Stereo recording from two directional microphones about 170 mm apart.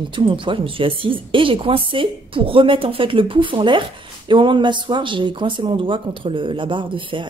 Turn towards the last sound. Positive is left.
turn(degrees=-30)  # may be behind; listen again after turning